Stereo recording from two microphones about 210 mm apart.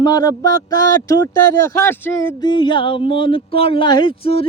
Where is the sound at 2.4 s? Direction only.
20° left (ahead or behind).